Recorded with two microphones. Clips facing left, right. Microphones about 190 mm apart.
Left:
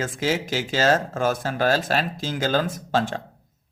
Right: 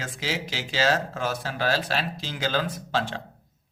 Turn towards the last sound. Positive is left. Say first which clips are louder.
# left 4 dB
turn(degrees=45)  # may be behind; listen again after turning